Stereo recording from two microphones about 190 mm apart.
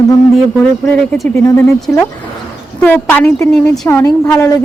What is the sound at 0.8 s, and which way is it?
Speech, 10° left (ahead or behind).